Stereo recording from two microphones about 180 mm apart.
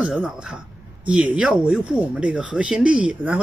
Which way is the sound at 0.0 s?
5° right (ahead or behind).